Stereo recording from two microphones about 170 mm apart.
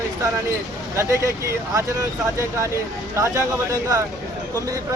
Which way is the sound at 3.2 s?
20° right (ahead or behind).